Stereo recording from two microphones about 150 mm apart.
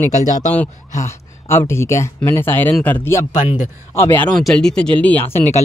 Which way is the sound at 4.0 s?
15° left (ahead or behind).